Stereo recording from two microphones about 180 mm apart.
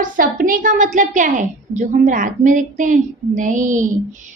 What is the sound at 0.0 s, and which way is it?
A woman's voice, 50° right (ahead or behind).